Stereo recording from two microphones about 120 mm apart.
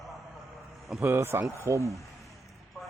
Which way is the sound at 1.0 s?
20° right (ahead or behind).